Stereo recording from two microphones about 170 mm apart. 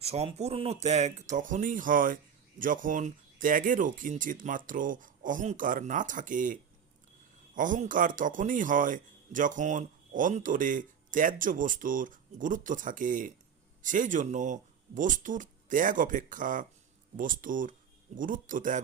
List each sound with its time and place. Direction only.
0.0 s speech: 40° right (ahead or behind)